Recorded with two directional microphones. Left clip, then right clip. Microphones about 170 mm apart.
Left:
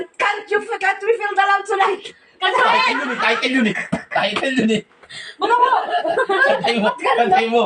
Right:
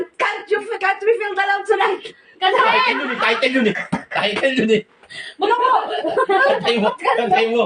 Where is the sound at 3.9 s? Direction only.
25° right (ahead or behind).